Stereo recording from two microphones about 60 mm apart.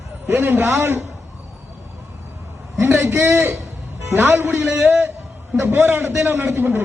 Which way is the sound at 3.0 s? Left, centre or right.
Right.